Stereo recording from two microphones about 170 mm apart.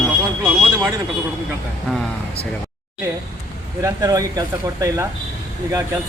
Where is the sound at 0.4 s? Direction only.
15° right (ahead or behind).